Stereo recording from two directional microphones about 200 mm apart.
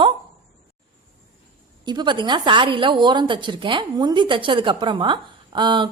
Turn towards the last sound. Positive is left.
turn(degrees=-25)  # may be behind; listen again after turning